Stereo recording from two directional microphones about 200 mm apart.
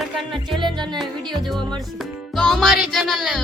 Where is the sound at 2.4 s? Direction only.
Centre (ahead or behind).